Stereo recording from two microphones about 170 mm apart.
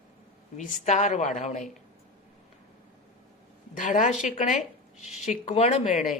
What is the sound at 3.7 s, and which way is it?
Speech, 50° left (ahead or behind).